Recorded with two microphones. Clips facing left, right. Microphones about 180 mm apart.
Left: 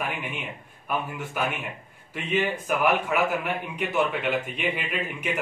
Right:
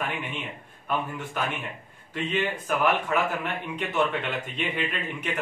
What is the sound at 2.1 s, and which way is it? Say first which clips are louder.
A man's voice: left 1 dB; 10° left (ahead or behind).